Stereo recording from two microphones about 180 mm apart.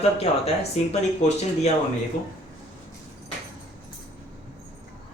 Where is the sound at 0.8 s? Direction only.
40° left (ahead or behind).